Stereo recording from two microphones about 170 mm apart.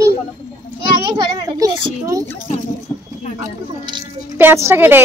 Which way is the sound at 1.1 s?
20° right (ahead or behind).